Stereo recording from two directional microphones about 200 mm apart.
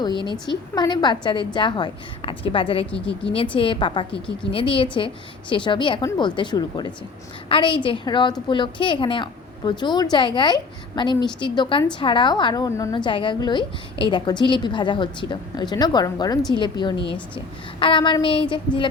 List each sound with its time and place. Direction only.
0.0 s a woman's voice: 25° left (ahead or behind)